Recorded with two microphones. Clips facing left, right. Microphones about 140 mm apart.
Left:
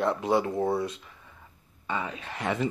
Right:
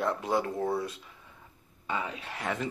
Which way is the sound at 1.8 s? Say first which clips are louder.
Left 2 dB; 10° right (ahead or behind).